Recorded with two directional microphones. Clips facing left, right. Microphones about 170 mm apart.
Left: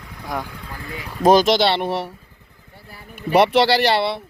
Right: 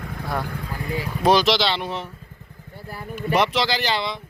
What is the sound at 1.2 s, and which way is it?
Speech, 45° left (ahead or behind).